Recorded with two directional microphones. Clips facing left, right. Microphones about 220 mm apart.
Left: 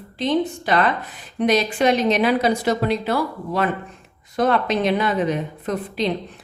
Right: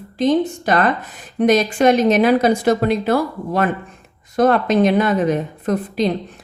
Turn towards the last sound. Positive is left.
turn(degrees=-45)  # may be behind; listen again after turning